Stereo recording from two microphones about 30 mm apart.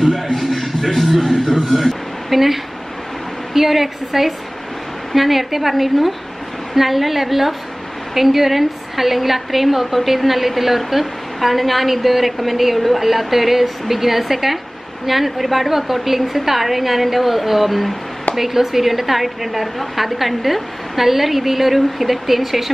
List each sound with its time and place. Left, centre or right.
0.4 s music: centre
1.5 s a woman's voice: centre
18.3 s a woman's voice: centre